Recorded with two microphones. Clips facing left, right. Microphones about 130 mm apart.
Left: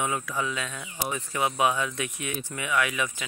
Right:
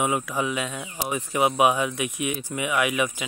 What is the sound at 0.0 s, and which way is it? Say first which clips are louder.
Speech: right 4 dB; 20° right (ahead or behind).